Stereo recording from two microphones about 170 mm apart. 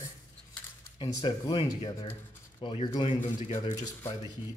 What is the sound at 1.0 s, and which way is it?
A man's voice, 25° left (ahead or behind).